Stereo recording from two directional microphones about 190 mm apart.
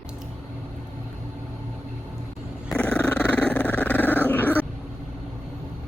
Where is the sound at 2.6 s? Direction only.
5° left (ahead or behind).